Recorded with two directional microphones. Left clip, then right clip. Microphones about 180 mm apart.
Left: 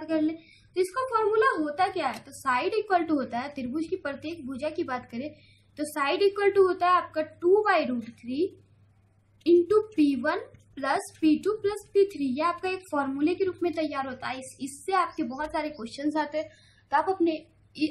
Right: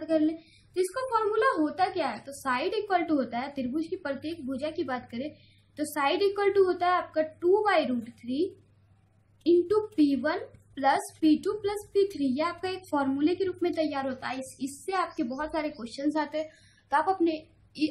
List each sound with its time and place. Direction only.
0.0 s a woman's voice: 10° left (ahead or behind)